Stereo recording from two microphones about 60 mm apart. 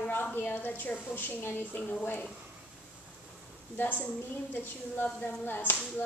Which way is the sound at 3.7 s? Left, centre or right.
Left.